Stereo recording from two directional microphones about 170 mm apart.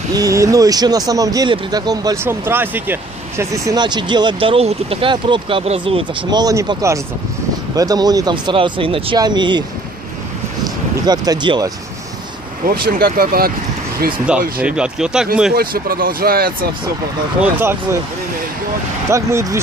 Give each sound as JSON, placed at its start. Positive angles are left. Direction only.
{"t": 0.1, "sound": "speech", "side_deg": -20}
{"t": 6.4, "sound": "speech", "side_deg": -20}
{"t": 11.1, "sound": "speech", "side_deg": -25}
{"t": 12.8, "sound": "speech", "side_deg": -55}
{"t": 14.3, "sound": "speech", "side_deg": -5}
{"t": 15.5, "sound": "speech", "side_deg": -60}
{"t": 17.4, "sound": "speech", "side_deg": -15}
{"t": 19.0, "sound": "speech", "side_deg": -15}